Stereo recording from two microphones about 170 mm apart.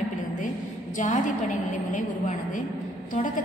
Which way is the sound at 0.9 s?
45° left (ahead or behind).